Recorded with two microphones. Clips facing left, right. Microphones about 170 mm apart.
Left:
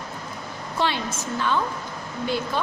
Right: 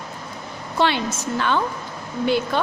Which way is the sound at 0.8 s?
75° right (ahead or behind).